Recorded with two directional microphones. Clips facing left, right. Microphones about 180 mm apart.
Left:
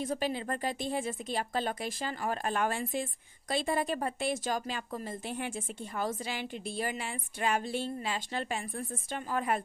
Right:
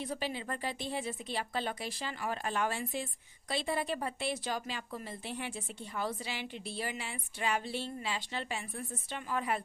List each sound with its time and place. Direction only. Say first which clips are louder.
0.0 s speech: left 5 dB; 45° left (ahead or behind)